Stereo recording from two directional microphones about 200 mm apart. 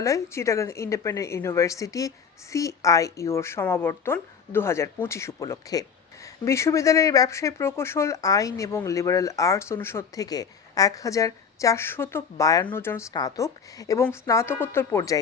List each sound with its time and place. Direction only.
0.0 s speech: 15° left (ahead or behind)